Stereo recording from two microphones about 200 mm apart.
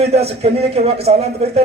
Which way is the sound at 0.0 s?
30° right (ahead or behind).